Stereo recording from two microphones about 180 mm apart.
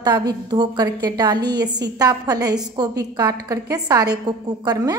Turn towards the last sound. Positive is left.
turn(degrees=-20)  # may be behind; listen again after turning